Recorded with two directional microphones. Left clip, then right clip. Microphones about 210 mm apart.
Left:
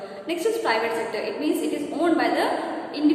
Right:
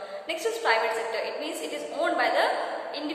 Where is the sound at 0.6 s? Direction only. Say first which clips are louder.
Left 1 dB; 10° right (ahead or behind).